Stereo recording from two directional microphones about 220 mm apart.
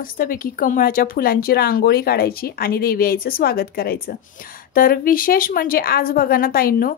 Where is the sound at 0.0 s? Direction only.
40° left (ahead or behind).